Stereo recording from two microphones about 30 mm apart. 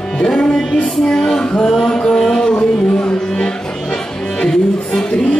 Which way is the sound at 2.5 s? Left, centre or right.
Left.